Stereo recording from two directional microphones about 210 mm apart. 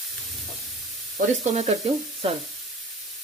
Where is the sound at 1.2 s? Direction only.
35° right (ahead or behind).